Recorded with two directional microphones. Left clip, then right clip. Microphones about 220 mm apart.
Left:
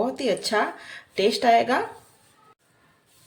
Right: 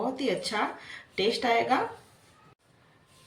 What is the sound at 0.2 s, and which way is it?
Speech, 45° left (ahead or behind).